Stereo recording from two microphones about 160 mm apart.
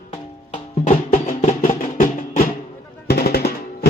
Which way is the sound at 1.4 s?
55° left (ahead or behind).